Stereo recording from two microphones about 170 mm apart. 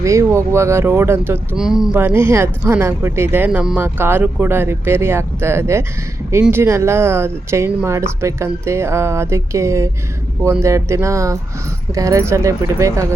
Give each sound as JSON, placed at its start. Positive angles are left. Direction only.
{"t": 0.0, "sound": "speech", "side_deg": -15}
{"t": 1.5, "sound": "speech", "side_deg": -5}
{"t": 2.0, "sound": "speech", "side_deg": -15}